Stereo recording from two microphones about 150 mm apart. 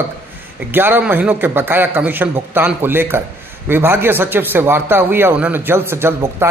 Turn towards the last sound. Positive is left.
turn(degrees=-15)  # may be behind; listen again after turning